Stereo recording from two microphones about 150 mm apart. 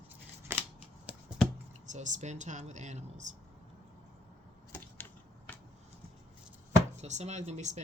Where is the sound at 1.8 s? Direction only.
55° right (ahead or behind).